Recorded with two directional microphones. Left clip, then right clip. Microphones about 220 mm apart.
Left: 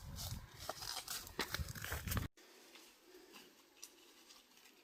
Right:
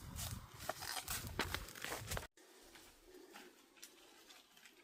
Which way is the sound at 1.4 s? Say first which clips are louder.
Even; 20° left (ahead or behind).